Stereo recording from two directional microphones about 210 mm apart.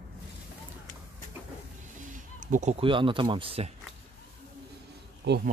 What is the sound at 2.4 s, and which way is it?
Speech, 35° right (ahead or behind).